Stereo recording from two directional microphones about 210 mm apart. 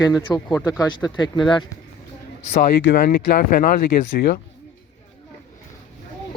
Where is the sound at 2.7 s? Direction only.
50° left (ahead or behind).